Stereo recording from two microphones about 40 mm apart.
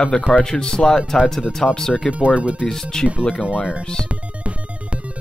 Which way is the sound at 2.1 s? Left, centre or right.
Right.